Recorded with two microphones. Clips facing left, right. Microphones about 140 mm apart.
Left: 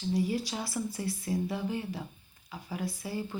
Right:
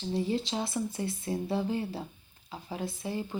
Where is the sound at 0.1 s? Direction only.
25° right (ahead or behind).